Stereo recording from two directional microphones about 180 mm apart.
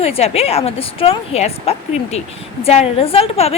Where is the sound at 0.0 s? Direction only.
35° left (ahead or behind).